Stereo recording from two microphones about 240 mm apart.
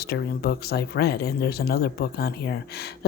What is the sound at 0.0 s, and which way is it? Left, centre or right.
Speech, left.